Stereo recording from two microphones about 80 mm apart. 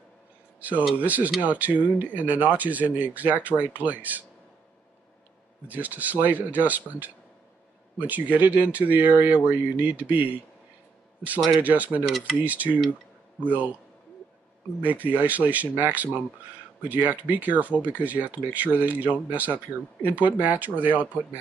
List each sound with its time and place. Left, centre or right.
0.6 s speech: right
5.7 s speech: right
11.6 s speech: centre
14.8 s speech: right